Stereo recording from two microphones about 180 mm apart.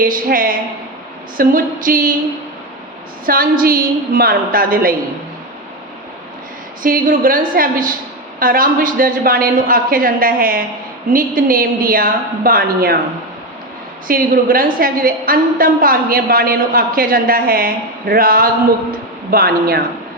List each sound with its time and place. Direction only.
0.0 s a woman's voice: 50° right (ahead or behind)
3.2 s a woman's voice: 55° right (ahead or behind)
6.8 s a woman's voice: 50° right (ahead or behind)
14.1 s a woman's voice: 50° right (ahead or behind)